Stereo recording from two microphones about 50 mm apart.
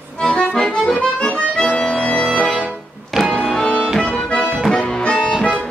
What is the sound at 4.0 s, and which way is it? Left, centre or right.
Accordion, centre.